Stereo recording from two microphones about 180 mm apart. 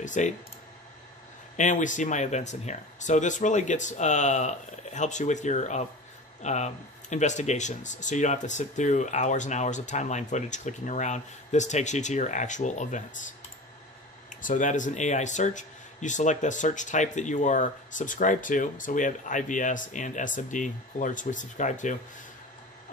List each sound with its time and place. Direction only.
0.0 s speech: 45° left (ahead or behind)
1.6 s speech: 45° left (ahead or behind)
14.3 s speech: 45° left (ahead or behind)